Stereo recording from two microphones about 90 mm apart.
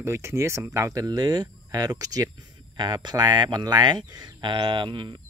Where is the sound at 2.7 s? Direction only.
55° right (ahead or behind).